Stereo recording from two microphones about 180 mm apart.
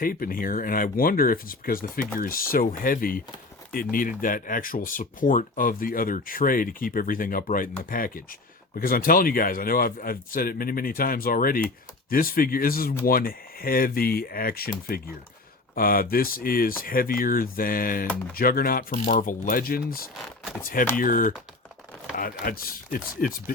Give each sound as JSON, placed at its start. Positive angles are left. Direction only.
{"t": 0.0, "sound": "speech", "side_deg": 55}